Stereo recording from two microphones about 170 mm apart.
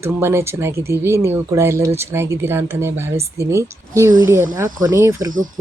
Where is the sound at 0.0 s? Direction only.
15° right (ahead or behind).